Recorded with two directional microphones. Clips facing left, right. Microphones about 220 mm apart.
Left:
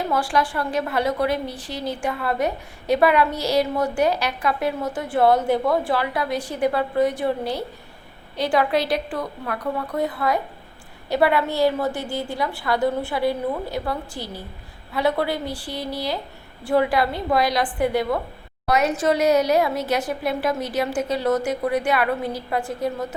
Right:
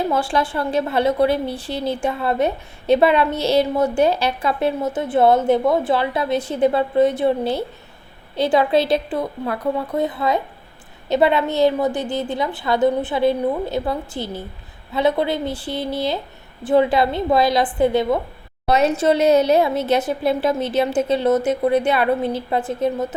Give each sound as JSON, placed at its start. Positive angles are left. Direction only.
{"t": 0.1, "sound": "a woman's voice", "side_deg": -25}